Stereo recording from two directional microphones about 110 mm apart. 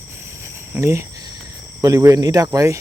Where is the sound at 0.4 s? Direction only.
25° right (ahead or behind).